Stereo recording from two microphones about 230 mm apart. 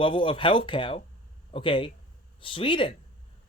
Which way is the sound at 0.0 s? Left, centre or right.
Left.